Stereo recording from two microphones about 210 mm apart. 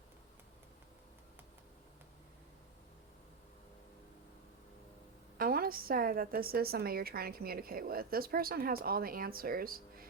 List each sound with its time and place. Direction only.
5.4 s a woman's voice: 45° right (ahead or behind)